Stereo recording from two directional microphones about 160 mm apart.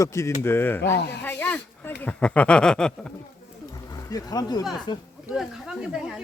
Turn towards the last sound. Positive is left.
turn(degrees=-5)  # may be behind; listen again after turning